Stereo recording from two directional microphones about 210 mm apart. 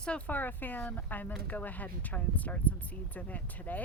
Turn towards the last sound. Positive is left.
turn(degrees=10)  # may be behind; listen again after turning